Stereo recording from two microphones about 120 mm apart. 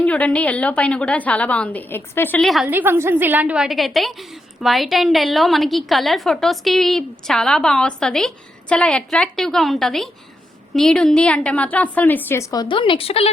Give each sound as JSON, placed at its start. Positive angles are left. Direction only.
{"t": 0.0, "sound": "a woman's voice", "side_deg": 10}
{"t": 2.4, "sound": "a woman's voice", "side_deg": 0}
{"t": 2.6, "sound": "a woman's voice", "side_deg": -15}
{"t": 12.6, "sound": "a woman's voice", "side_deg": 45}